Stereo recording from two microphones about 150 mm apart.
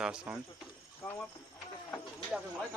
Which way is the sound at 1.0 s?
10° left (ahead or behind).